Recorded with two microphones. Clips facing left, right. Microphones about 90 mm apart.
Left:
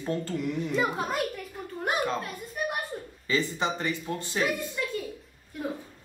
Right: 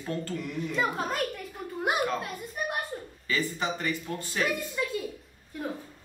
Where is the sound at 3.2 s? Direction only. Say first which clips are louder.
Left 2 dB; 20° left (ahead or behind).